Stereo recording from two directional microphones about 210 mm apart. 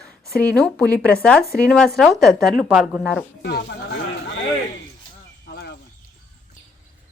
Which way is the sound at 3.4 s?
50° left (ahead or behind).